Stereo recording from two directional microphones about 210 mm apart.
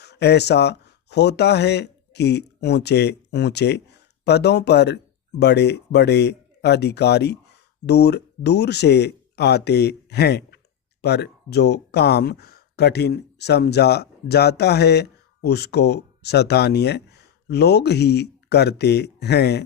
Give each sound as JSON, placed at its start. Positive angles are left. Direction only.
{"t": 0.0, "sound": "speech", "side_deg": 50}